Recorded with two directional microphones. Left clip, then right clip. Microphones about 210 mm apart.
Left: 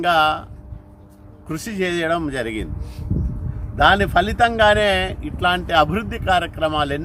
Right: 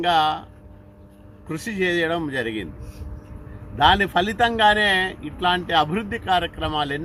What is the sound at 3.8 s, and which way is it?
Speech, 15° left (ahead or behind).